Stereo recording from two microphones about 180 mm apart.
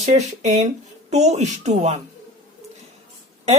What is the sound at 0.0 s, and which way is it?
Speech, 40° right (ahead or behind).